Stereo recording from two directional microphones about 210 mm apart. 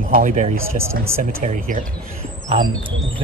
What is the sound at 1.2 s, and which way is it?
Speech, 40° right (ahead or behind).